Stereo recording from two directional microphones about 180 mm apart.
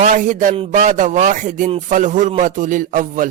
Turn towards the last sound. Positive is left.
turn(degrees=-45)  # may be behind; listen again after turning